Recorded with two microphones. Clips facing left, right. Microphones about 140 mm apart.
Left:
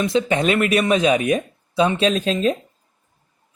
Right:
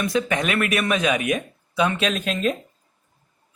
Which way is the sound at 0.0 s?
25° left (ahead or behind).